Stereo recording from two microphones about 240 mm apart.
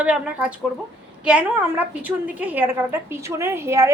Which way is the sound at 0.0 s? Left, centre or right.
Centre.